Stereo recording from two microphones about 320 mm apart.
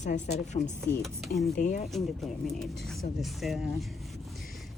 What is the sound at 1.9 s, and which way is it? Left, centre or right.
Speech, centre.